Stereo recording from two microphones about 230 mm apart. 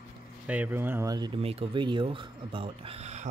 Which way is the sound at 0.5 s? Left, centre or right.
Centre.